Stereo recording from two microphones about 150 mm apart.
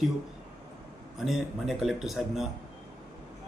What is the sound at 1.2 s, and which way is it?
A man's voice, centre (ahead or behind).